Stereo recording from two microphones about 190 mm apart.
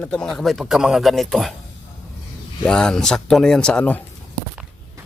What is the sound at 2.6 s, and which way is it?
Speech, 5° left (ahead or behind).